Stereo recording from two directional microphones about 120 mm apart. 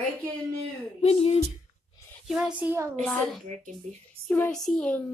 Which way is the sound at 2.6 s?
20° right (ahead or behind).